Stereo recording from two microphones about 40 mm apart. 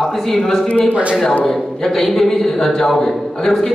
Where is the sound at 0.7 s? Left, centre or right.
Left.